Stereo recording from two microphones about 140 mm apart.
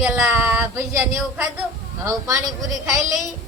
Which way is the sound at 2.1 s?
25° right (ahead or behind).